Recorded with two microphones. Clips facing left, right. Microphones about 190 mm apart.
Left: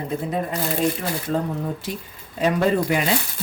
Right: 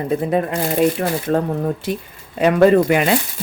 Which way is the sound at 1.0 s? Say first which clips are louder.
Right 6 dB; 55° right (ahead or behind).